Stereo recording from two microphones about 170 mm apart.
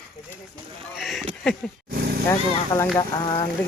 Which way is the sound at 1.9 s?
65° right (ahead or behind).